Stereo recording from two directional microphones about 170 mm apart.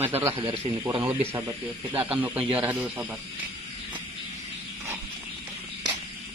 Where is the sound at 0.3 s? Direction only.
35° right (ahead or behind).